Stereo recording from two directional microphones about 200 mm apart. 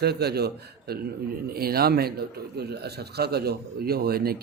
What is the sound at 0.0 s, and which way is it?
Speech, 55° right (ahead or behind).